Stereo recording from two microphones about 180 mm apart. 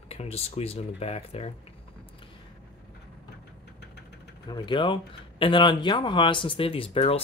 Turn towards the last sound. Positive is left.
turn(degrees=35)  # may be behind; listen again after turning